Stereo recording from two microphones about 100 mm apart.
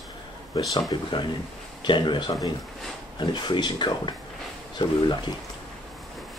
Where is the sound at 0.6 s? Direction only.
40° left (ahead or behind).